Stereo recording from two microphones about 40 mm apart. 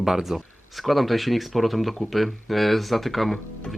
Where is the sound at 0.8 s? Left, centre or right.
Centre.